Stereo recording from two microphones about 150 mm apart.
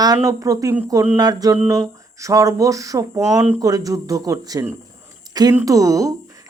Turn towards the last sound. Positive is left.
turn(degrees=-20)  # may be behind; listen again after turning